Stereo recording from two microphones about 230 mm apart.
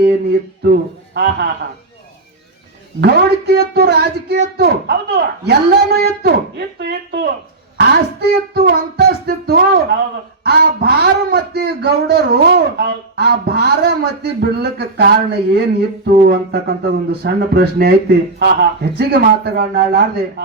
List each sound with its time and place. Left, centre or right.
1.1 s a man's voice: right
3.0 s a man's voice: right